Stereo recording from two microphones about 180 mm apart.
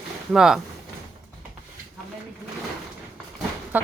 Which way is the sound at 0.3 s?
Centre (ahead or behind).